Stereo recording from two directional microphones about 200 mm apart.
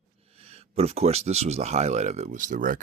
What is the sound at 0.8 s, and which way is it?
Speech, 30° right (ahead or behind).